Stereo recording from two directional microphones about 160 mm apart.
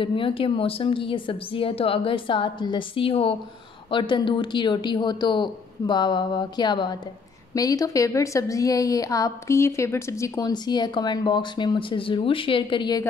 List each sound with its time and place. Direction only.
0.0 s a woman's voice: 35° left (ahead or behind)